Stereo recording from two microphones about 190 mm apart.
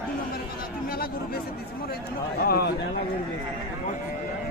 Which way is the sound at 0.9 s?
50° left (ahead or behind).